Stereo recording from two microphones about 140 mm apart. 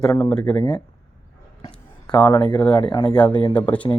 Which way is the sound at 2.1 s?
30° left (ahead or behind).